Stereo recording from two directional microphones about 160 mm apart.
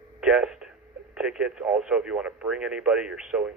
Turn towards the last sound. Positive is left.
turn(degrees=-5)  # may be behind; listen again after turning